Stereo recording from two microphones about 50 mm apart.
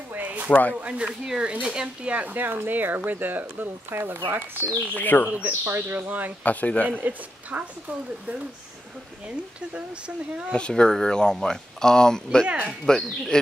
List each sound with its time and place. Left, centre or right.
0.1 s a sound: right
0.7 s speech: right
1.0 s speech: centre
2.1 s speech: right
4.9 s speech: left
5.5 s speech: right
5.9 s speech: right
6.4 s speech: left
7.0 s speech: right
9.8 s speech: right
10.5 s speech: centre